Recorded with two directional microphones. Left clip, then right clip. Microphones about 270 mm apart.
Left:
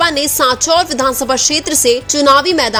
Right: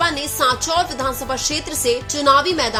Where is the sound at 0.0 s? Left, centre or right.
Left.